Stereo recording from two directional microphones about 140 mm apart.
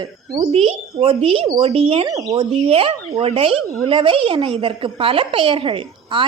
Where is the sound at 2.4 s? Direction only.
45° right (ahead or behind).